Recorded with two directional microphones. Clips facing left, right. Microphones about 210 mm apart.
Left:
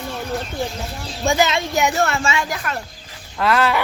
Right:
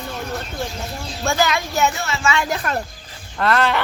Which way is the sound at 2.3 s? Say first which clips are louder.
Right 1 dB; 30° left (ahead or behind).